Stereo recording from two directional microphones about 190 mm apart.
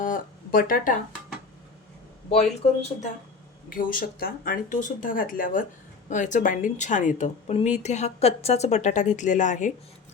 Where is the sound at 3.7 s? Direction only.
45° left (ahead or behind).